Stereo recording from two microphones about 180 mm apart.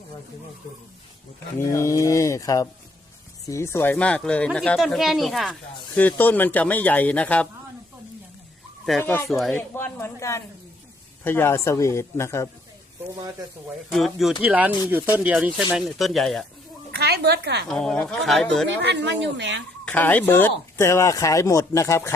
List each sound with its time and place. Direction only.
1.5 s speech: 15° left (ahead or behind)
9.0 s speech: 10° left (ahead or behind)
13.9 s speech: centre (ahead or behind)
17.0 s speech: 65° right (ahead or behind)
17.7 s speech: 5° left (ahead or behind)
18.8 s speech: 70° right (ahead or behind); by 19.6 s 85° right
19.8 s speech: 10° left (ahead or behind)